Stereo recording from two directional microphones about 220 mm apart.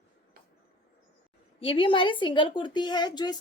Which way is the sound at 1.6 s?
25° left (ahead or behind).